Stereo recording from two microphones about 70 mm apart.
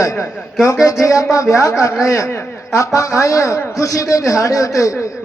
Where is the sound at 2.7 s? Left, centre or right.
Left.